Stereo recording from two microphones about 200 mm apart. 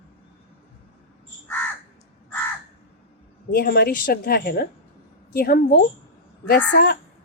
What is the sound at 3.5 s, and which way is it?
A woman's voice, 50° left (ahead or behind).